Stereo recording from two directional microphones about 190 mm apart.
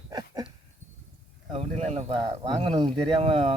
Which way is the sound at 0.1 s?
20° right (ahead or behind).